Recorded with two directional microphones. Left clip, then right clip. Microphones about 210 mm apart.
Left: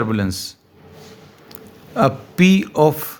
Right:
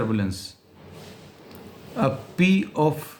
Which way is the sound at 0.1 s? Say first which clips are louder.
Left 5 dB; 45° left (ahead or behind).